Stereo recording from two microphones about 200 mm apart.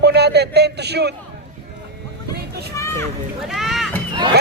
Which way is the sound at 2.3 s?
55° right (ahead or behind).